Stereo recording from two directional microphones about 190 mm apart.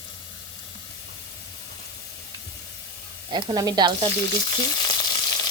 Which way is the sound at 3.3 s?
20° right (ahead or behind).